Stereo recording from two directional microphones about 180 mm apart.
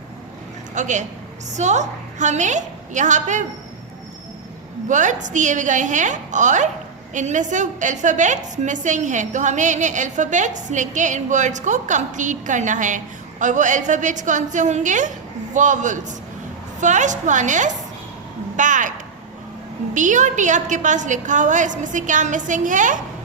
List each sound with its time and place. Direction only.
0.7 s a woman's voice: 40° right (ahead or behind)
4.9 s a woman's voice: 45° right (ahead or behind)